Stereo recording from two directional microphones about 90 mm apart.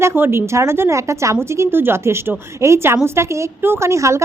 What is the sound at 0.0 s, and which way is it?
A woman's voice, 25° right (ahead or behind).